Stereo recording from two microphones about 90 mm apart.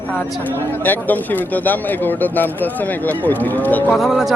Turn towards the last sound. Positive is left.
turn(degrees=-5)  # may be behind; listen again after turning